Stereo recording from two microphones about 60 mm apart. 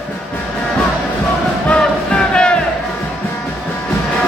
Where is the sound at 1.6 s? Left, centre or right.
Centre.